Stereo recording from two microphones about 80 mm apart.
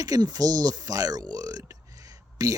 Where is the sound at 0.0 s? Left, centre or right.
Right.